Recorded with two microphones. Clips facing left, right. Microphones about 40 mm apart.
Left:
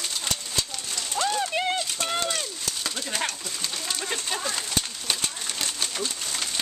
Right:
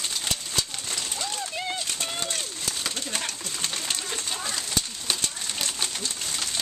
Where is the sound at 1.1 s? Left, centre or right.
Left.